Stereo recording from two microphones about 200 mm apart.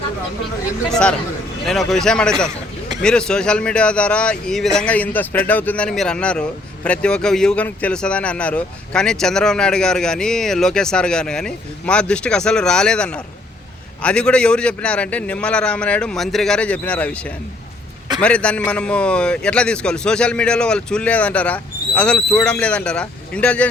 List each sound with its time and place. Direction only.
0.9 s speech: 5° left (ahead or behind)